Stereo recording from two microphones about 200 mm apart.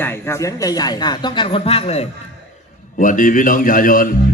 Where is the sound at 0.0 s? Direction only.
10° left (ahead or behind); by 2.0 s 30° left (ahead or behind).